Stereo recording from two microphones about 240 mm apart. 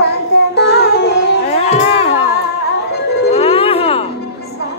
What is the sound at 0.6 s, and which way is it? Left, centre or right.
Music, left.